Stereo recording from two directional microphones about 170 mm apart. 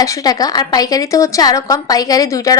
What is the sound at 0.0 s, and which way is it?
A woman's voice, 20° left (ahead or behind).